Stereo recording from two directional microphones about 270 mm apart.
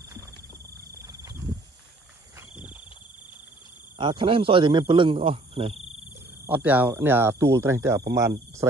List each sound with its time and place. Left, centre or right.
0.9 s a sound: centre
2.5 s cricket: centre
4.0 s a man's voice: centre
6.4 s speech: centre